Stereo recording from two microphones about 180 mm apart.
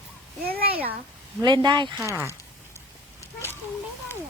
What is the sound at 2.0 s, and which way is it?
Speech, 10° right (ahead or behind).